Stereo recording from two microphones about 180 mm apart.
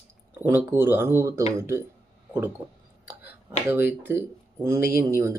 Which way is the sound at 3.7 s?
10° right (ahead or behind).